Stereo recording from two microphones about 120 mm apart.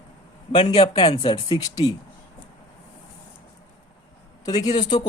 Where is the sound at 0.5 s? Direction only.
55° left (ahead or behind); by 1.9 s 35° left (ahead or behind).